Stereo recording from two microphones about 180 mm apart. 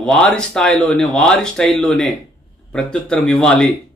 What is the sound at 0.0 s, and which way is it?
A man's voice, 5° left (ahead or behind).